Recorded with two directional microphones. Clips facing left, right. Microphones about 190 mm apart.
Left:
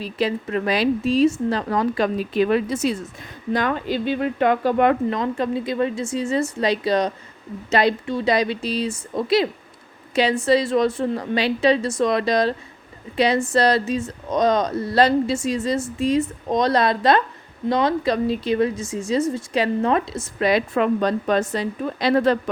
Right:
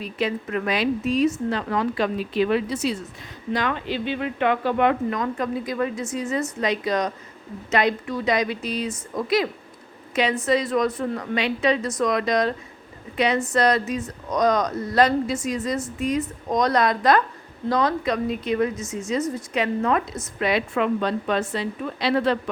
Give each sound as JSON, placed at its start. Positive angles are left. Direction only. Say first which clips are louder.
{"t": 0.0, "sound": "speech", "louder": "left 3 dB", "side_deg": 30}
{"t": 5.1, "sound": "speech", "louder": "left 3 dB", "side_deg": 30}